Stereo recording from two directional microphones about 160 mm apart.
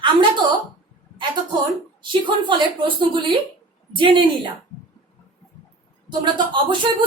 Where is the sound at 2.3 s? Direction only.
30° right (ahead or behind).